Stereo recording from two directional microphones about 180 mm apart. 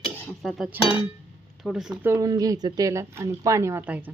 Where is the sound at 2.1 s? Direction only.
20° right (ahead or behind).